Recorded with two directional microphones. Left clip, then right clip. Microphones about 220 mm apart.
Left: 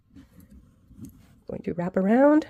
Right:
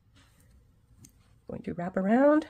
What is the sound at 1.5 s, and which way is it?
Speech, 30° left (ahead or behind).